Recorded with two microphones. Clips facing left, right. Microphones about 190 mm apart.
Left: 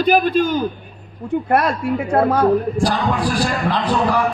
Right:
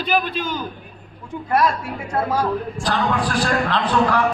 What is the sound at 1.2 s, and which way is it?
A woman's voice, 60° left (ahead or behind).